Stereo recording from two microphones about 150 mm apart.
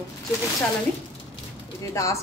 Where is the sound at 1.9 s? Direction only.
20° left (ahead or behind).